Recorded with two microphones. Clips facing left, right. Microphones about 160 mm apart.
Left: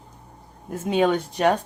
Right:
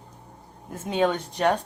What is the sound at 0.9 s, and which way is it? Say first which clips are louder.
Speech: left 3 dB; 10° left (ahead or behind).